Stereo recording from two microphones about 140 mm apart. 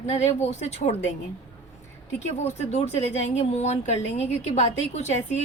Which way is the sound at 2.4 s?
55° left (ahead or behind).